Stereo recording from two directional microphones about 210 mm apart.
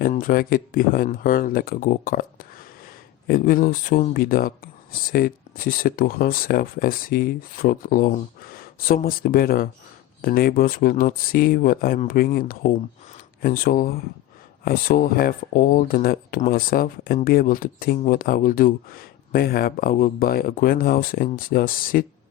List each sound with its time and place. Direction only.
0.0 s speech: 40° left (ahead or behind)